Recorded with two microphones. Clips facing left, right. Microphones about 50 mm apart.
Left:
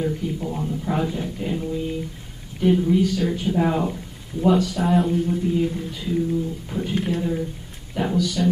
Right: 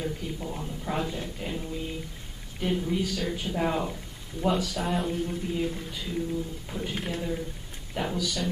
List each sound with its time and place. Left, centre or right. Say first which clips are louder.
0.0 s speech: left 8 dB; centre